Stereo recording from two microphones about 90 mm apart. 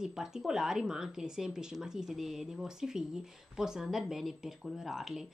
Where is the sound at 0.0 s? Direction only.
5° right (ahead or behind).